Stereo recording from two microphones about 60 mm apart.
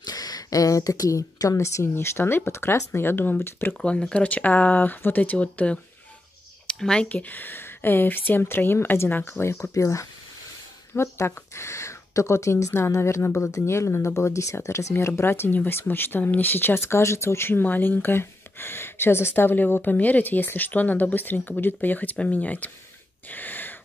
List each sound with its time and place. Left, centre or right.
0.1 s a woman's voice: left
1.6 s speech: left
3.8 s speech: centre
7.1 s speech: left
11.0 s speech: left
16.8 s speech: left
23.3 s wheeze: left